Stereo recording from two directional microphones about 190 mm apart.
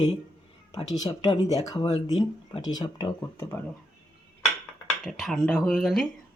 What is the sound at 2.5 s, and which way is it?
Speech, 20° left (ahead or behind).